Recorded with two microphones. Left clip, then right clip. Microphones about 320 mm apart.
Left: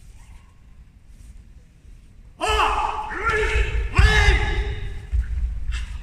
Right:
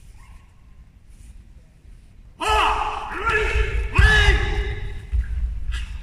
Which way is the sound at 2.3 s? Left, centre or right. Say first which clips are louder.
Right 1 dB; centre.